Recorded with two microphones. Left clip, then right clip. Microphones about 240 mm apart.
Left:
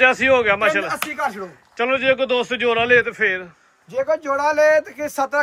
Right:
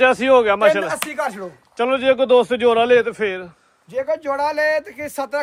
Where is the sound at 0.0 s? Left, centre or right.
Centre.